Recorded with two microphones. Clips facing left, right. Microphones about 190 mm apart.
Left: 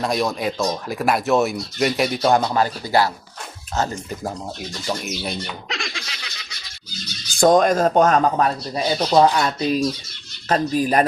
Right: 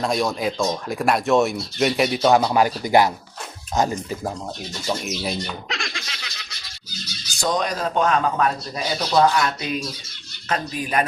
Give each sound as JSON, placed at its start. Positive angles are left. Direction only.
{"t": 0.0, "sound": "speech", "side_deg": 0}
{"t": 2.5, "sound": "speech", "side_deg": -15}
{"t": 4.9, "sound": "bird", "side_deg": 0}
{"t": 7.3, "sound": "speech", "side_deg": 50}